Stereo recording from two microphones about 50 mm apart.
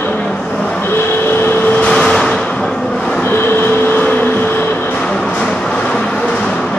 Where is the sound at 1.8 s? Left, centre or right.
Centre.